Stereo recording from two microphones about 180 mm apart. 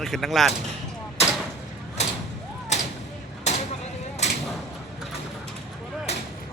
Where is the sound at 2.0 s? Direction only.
35° left (ahead or behind).